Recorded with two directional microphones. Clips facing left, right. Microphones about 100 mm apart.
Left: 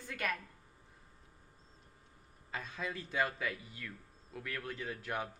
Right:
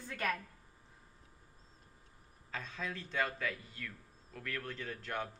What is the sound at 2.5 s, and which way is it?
A man's voice, 10° left (ahead or behind).